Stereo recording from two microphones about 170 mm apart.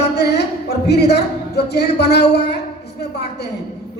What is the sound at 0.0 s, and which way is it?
Speech, 80° left.